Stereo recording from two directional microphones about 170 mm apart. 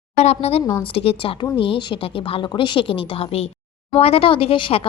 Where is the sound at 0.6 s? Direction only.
15° left (ahead or behind).